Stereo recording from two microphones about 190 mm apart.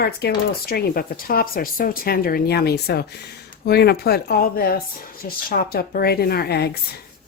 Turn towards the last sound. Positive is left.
turn(degrees=55)  # may be behind; listen again after turning